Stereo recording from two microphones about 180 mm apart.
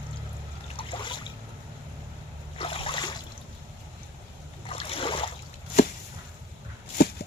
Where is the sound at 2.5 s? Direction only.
30° left (ahead or behind).